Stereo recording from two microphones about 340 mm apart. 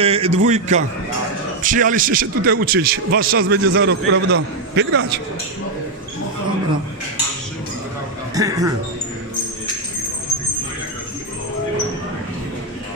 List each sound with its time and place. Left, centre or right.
0.0 s a man's voice: centre; by 5.0 s right
8.4 s a man's voice: centre